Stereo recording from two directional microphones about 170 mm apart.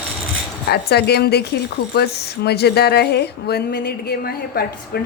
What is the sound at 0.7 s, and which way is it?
Speech, 70° left (ahead or behind).